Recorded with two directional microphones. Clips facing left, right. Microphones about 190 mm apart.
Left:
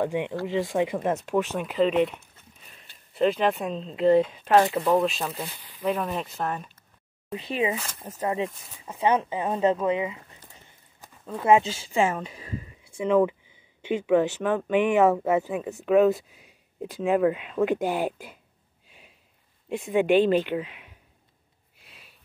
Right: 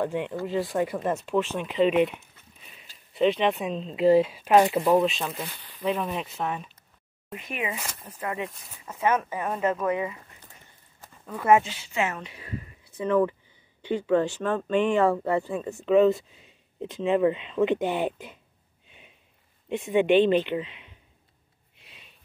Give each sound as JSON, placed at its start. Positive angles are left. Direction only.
{"t": 0.0, "sound": "speech", "side_deg": 15}
{"t": 4.9, "sound": "speech", "side_deg": 0}
{"t": 7.3, "sound": "a woman's voice", "side_deg": 30}
{"t": 8.0, "sound": "speech", "side_deg": 45}
{"t": 9.0, "sound": "speech", "side_deg": 20}
{"t": 11.0, "sound": "a sound", "side_deg": 25}
{"t": 11.6, "sound": "a woman's voice", "side_deg": 35}
{"t": 12.9, "sound": "speech", "side_deg": 10}
{"t": 15.8, "sound": "speech", "side_deg": 0}
{"t": 18.9, "sound": "a sound", "side_deg": 0}
{"t": 19.7, "sound": "speech", "side_deg": 0}
{"t": 21.7, "sound": "sniff", "side_deg": 0}